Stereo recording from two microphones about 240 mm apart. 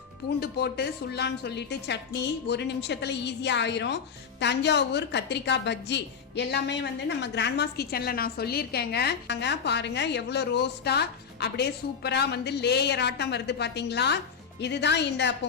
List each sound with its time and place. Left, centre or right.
0.3 s a woman's voice: left